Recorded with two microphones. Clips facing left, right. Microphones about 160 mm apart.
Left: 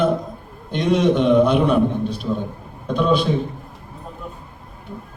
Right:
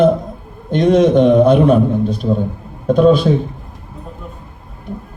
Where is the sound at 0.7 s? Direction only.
45° right (ahead or behind).